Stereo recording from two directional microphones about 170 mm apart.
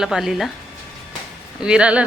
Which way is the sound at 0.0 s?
5° right (ahead or behind).